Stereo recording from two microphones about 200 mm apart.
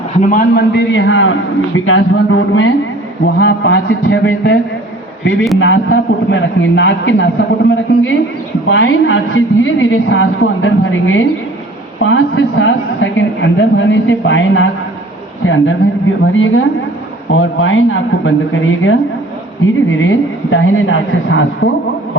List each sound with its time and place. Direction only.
0.2 s a man's voice: 40° left (ahead or behind); by 2.7 s 75° left (ahead or behind)
3.2 s a man's voice: 60° left (ahead or behind); by 18.3 s 75° left (ahead or behind)
20.0 s a man's voice: 75° left (ahead or behind)